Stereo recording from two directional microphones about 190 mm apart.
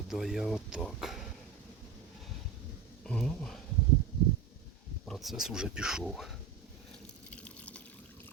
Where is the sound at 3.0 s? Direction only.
5° left (ahead or behind).